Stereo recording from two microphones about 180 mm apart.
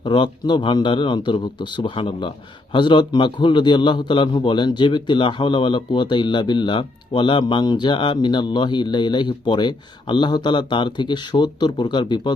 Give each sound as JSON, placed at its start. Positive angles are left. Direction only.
{"t": 0.0, "sound": "a man's voice", "side_deg": 25}